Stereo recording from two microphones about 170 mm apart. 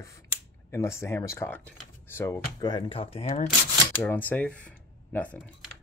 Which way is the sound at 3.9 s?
10° left (ahead or behind).